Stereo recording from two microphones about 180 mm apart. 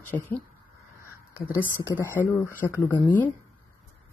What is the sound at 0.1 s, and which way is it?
Speech, 10° left (ahead or behind).